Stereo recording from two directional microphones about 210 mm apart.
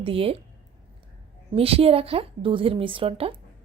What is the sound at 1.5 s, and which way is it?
A woman's voice, 25° right (ahead or behind).